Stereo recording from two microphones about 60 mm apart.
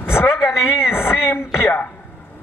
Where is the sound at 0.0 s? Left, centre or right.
Left.